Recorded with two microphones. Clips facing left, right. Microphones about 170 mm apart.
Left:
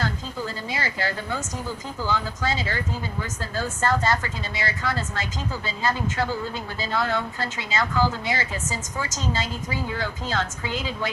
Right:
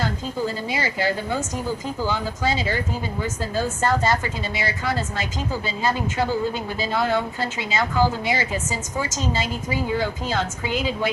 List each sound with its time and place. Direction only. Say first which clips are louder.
0.7 s a woman's voice: right 5 dB; 15° right (ahead or behind)